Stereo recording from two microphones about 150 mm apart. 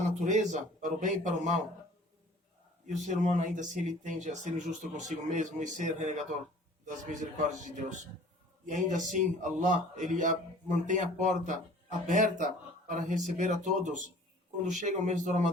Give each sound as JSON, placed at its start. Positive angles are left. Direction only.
{"t": 0.3, "sound": "a man's voice", "side_deg": -55}
{"t": 2.8, "sound": "a man's voice", "side_deg": -55}